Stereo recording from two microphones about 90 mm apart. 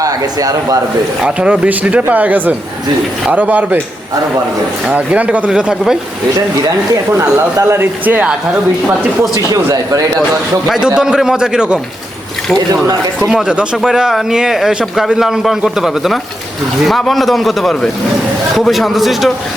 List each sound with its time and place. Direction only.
0.0 s speech: 40° right (ahead or behind)
1.2 s speech: 15° right (ahead or behind)
4.9 s speech: 15° right (ahead or behind)
7.7 s speech: 25° right (ahead or behind)
9.3 s speech: 40° right (ahead or behind)
10.7 s speech: 10° right (ahead or behind)
13.1 s speech: centre (ahead or behind)